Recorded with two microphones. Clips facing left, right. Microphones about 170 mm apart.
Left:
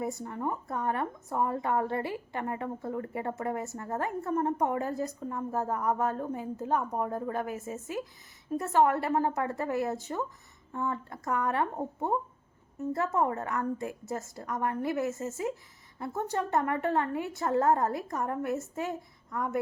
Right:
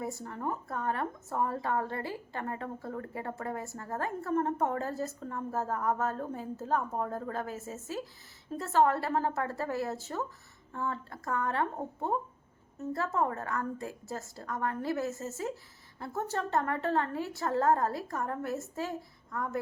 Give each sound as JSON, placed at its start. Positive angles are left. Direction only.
{"t": 0.0, "sound": "a woman's voice", "side_deg": 20}